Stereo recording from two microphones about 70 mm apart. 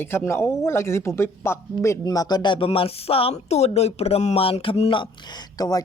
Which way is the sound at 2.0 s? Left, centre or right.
Left.